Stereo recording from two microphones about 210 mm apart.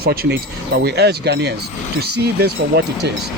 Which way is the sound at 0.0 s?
45° right (ahead or behind).